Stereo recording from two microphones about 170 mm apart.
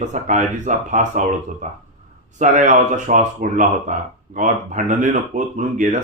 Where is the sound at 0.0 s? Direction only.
45° right (ahead or behind).